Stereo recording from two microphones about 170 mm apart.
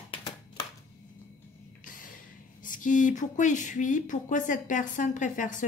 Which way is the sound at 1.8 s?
55° left (ahead or behind).